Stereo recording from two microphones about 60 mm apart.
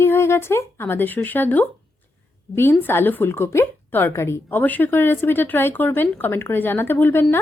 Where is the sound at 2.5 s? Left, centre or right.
Left.